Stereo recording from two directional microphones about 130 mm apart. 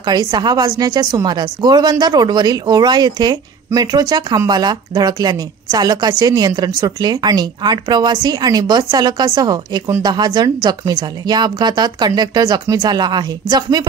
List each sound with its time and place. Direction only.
0.0 s a woman's voice: 35° right (ahead or behind)